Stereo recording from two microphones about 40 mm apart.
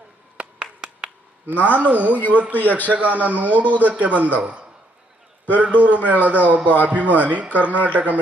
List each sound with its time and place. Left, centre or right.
0.3 s clapping: right
1.5 s a man's voice: right
5.7 s a man's voice: right